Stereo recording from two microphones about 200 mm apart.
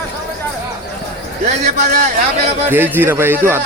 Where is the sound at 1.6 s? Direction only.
35° right (ahead or behind).